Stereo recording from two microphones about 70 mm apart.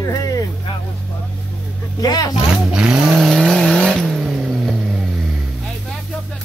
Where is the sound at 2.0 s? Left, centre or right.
Left.